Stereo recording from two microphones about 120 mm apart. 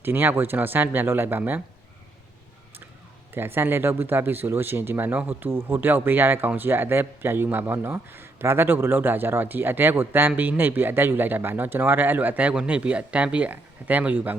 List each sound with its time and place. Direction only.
0.0 s speech: 15° right (ahead or behind)
3.3 s speech: 20° right (ahead or behind)